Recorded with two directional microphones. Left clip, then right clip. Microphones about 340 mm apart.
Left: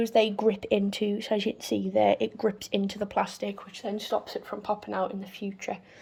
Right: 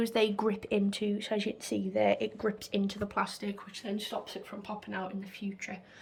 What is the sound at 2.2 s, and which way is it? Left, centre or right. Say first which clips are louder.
Speech: left 5 dB; left.